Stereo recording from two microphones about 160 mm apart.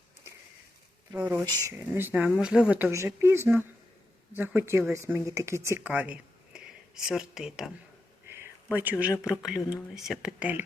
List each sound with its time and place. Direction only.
1.1 s speech: 10° right (ahead or behind)